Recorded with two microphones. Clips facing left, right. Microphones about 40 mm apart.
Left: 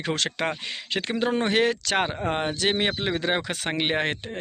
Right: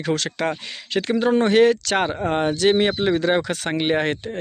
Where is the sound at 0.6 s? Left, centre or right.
Centre.